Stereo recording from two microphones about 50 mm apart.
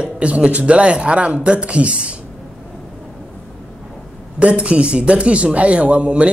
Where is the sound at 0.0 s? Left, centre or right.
Right.